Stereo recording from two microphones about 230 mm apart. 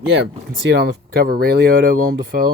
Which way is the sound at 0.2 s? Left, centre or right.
Right.